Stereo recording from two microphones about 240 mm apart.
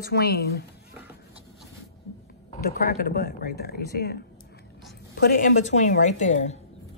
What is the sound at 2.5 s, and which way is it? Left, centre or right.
Speech, left.